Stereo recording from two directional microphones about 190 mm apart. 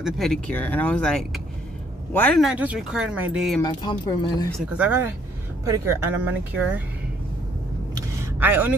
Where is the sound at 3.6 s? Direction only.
20° left (ahead or behind).